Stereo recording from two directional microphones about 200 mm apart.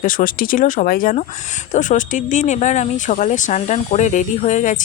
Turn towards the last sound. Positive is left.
turn(degrees=40)  # may be behind; listen again after turning